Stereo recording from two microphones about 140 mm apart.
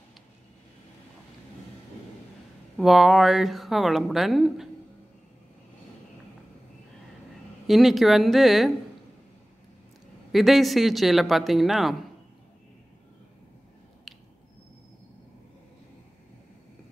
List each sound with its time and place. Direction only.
2.8 s a woman's voice: centre (ahead or behind)
7.6 s a woman's voice: centre (ahead or behind)
10.3 s a woman's voice: centre (ahead or behind)